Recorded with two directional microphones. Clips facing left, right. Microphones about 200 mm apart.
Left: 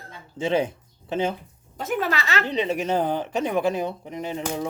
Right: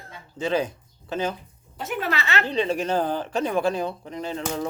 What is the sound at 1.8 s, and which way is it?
Speech, 45° left (ahead or behind).